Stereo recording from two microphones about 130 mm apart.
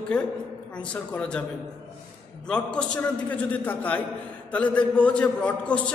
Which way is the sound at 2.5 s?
5° left (ahead or behind).